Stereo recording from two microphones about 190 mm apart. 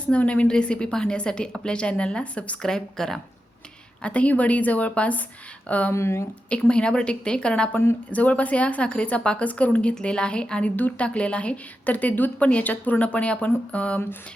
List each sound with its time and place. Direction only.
0.0 s a woman's voice: 5° left (ahead or behind)